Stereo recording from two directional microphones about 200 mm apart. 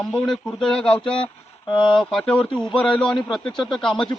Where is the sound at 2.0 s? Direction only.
5° left (ahead or behind).